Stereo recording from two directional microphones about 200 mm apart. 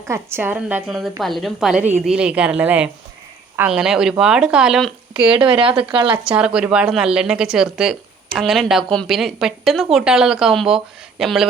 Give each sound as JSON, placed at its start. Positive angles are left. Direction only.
{"t": 0.1, "sound": "speech", "side_deg": -10}
{"t": 5.4, "sound": "speech", "side_deg": -25}
{"t": 6.2, "sound": "speech", "side_deg": -5}